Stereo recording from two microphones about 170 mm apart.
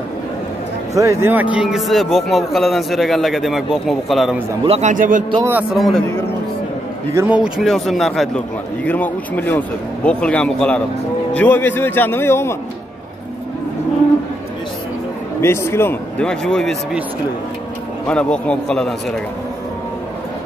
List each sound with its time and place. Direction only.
0.9 s speech: 15° right (ahead or behind); by 4.4 s centre (ahead or behind)
4.6 s speech: 40° right (ahead or behind)
4.9 s a man's voice: 50° right (ahead or behind)
5.4 s speech: 10° right (ahead or behind)
7.2 s speech: 5° right (ahead or behind); by 12.5 s 15° left (ahead or behind)
15.4 s speech: 15° left (ahead or behind)
18.0 s speech: 5° left (ahead or behind)